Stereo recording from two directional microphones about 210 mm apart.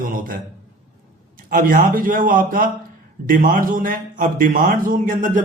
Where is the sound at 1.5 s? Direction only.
40° right (ahead or behind).